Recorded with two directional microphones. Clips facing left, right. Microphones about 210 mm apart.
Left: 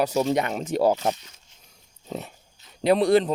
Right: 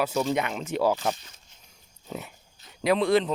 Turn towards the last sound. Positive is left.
turn(degrees=40)  # may be behind; listen again after turning